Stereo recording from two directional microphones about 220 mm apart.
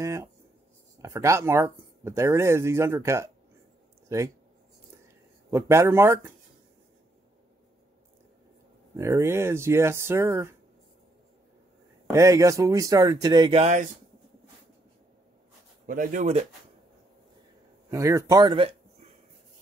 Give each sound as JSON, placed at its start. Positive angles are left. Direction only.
{"t": 0.0, "sound": "speech", "side_deg": -15}
{"t": 5.5, "sound": "speech", "side_deg": -10}
{"t": 8.9, "sound": "speech", "side_deg": -15}
{"t": 12.1, "sound": "speech", "side_deg": -15}
{"t": 15.9, "sound": "speech", "side_deg": -35}
{"t": 17.9, "sound": "speech", "side_deg": -15}